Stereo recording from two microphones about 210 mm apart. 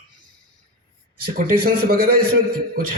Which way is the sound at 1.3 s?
45° right (ahead or behind).